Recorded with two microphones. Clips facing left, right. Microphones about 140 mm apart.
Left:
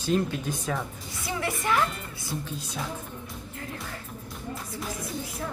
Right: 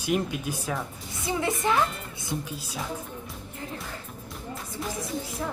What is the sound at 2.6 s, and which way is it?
Speech, 5° right (ahead or behind).